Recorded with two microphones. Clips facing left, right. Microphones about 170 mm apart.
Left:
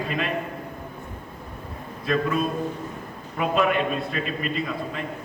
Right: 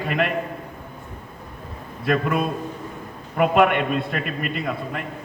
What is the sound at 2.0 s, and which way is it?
A man's voice, 60° right (ahead or behind).